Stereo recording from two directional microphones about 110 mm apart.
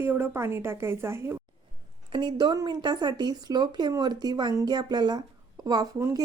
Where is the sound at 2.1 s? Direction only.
45° right (ahead or behind).